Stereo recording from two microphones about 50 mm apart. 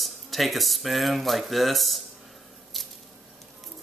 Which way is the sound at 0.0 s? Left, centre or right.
Centre.